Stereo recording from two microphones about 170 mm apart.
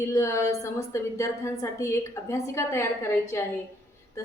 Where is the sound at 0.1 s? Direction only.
15° left (ahead or behind).